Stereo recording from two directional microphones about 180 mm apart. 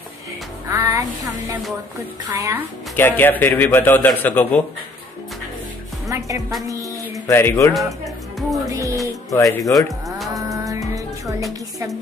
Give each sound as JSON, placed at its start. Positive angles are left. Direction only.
{"t": 0.7, "sound": "music", "side_deg": -15}
{"t": 2.3, "sound": "speech", "side_deg": -15}
{"t": 3.0, "sound": "a man's voice", "side_deg": 10}
{"t": 6.0, "sound": "a woman's voice", "side_deg": -20}
{"t": 6.7, "sound": "a sound", "side_deg": -20}
{"t": 7.2, "sound": "a man's voice", "side_deg": 15}
{"t": 8.6, "sound": "music", "side_deg": -20}
{"t": 9.3, "sound": "speech", "side_deg": 20}
{"t": 9.7, "sound": "moo", "side_deg": 0}
{"t": 10.3, "sound": "music", "side_deg": -20}